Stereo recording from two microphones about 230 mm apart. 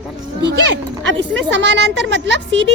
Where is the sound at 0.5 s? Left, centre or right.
Right.